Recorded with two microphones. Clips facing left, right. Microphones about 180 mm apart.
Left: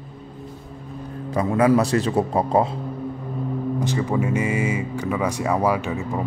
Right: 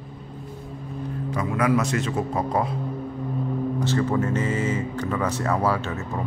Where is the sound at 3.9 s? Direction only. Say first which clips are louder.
Right 1 dB; 10° left (ahead or behind).